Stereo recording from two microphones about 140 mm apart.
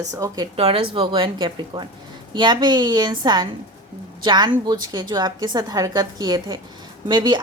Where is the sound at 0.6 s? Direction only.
45° right (ahead or behind).